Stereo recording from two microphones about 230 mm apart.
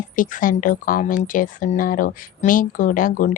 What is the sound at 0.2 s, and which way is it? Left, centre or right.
Speech, left.